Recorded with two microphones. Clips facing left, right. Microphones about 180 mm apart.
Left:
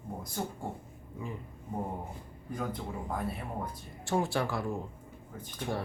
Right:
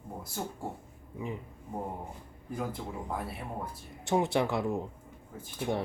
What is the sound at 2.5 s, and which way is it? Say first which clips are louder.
Speech: even; 5° right (ahead or behind).